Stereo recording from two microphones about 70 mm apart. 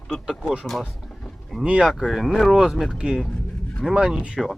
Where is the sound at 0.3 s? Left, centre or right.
Centre.